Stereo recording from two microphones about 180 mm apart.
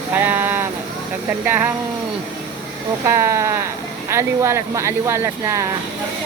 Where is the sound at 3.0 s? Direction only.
15° right (ahead or behind).